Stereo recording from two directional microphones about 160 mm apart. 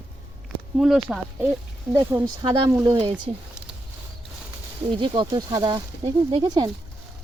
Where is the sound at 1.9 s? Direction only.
20° right (ahead or behind).